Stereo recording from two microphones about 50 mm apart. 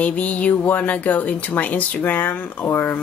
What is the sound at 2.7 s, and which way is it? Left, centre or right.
Speech, left.